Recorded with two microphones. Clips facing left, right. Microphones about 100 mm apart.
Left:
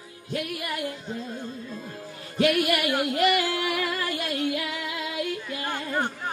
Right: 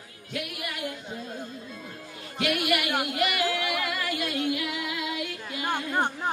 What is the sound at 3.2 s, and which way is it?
Music, 35° left (ahead or behind).